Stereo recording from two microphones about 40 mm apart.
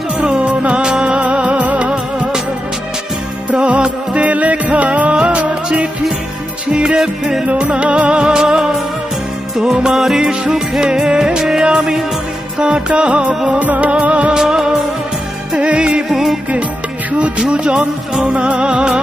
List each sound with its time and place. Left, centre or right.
0.2 s music: right
1.2 s music: right
1.9 s music: right
3.5 s music: right
6.7 s music: centre
7.4 s music: right
8.2 s music: centre
9.8 s music: centre; by 13.3 s right
13.5 s music: right
14.3 s music: centre
15.5 s music: right
16.0 s music: centre
17.1 s music: right